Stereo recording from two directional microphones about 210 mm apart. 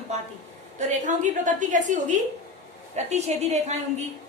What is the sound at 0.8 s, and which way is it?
A woman's voice, 35° right (ahead or behind).